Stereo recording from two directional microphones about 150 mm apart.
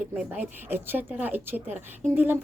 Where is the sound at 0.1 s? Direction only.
10° right (ahead or behind).